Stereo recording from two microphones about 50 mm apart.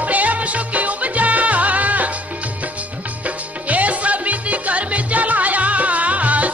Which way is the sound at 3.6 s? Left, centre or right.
Right.